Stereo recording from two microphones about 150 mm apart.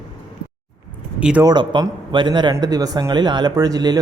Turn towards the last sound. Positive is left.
turn(degrees=-25)  # may be behind; listen again after turning